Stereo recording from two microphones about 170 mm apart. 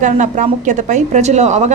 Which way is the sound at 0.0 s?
45° right (ahead or behind).